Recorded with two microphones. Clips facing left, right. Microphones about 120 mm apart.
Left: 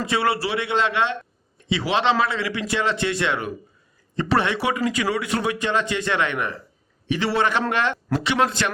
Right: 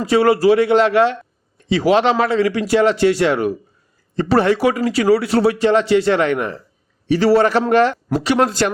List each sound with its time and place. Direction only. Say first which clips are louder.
0.0 s a man's voice: right 9 dB; 40° right (ahead or behind)